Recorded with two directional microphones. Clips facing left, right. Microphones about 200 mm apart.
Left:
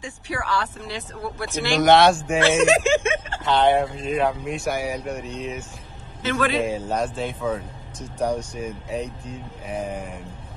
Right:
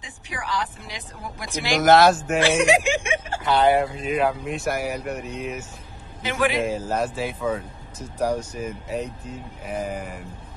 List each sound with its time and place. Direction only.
0.0 s speech: 15° right (ahead or behind)
1.8 s speech: centre (ahead or behind)
2.4 s speech: 15° right (ahead or behind)
6.6 s speech: centre (ahead or behind)